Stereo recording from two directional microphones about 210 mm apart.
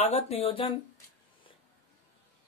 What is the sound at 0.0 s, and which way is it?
Speech, 30° left (ahead or behind).